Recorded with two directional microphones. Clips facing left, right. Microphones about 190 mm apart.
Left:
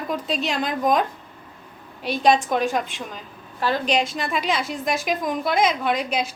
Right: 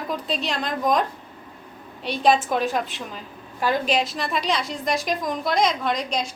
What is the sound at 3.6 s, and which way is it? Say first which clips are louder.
Speech: even; 10° right (ahead or behind).